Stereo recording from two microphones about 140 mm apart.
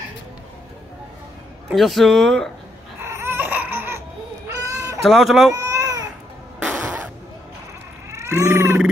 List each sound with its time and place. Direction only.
1.7 s speech: centre (ahead or behind)
3.0 s baby cry: 20° right (ahead or behind)
4.6 s a sound: 25° right (ahead or behind)
5.0 s speech: centre (ahead or behind)
5.5 s baby cry: 25° right (ahead or behind)
6.6 s a sound: 10° right (ahead or behind)
8.1 s cat: 20° right (ahead or behind)